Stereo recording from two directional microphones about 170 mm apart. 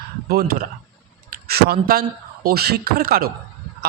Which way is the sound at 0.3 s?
60° right (ahead or behind).